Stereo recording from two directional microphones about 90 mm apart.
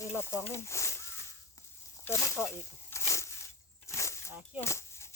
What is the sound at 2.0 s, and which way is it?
Snake, 30° left (ahead or behind).